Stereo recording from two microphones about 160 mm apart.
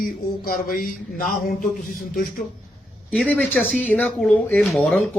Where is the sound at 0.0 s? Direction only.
60° left (ahead or behind).